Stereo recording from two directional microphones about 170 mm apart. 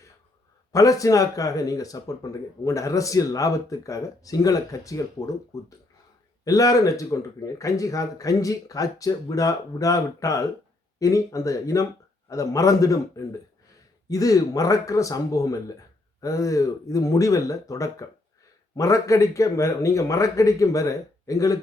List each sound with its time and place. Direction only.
0.7 s speech: 20° left (ahead or behind)